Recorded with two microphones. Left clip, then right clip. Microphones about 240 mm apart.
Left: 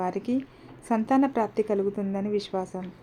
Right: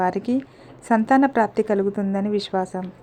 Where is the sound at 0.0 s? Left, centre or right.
Centre.